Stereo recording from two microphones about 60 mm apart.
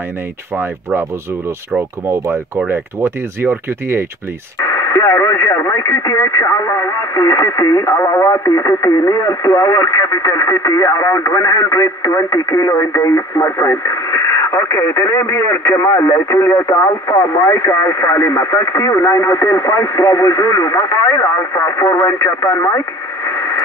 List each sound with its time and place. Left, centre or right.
0.6 s speech: right
4.6 s speech: left
7.8 s speech: left
23.2 s radio: left